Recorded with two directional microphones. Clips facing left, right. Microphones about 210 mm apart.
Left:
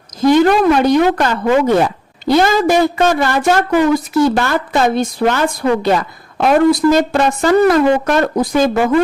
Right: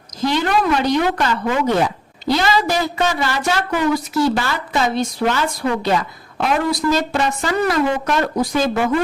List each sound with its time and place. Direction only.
0.3 s speech: 50° left (ahead or behind)